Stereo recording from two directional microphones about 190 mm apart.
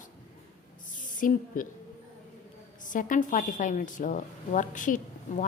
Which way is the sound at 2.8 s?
45° left (ahead or behind).